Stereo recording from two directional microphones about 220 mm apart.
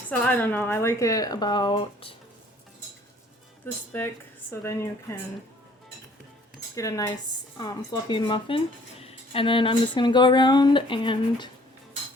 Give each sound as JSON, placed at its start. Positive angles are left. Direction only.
{"t": 0.1, "sound": "speech", "side_deg": 5}
{"t": 3.6, "sound": "speech", "side_deg": 10}
{"t": 6.7, "sound": "speech", "side_deg": 15}